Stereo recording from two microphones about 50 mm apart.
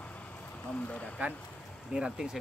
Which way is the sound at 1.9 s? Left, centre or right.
Centre.